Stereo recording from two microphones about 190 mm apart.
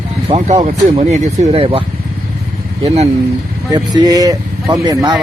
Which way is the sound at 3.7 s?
20° right (ahead or behind).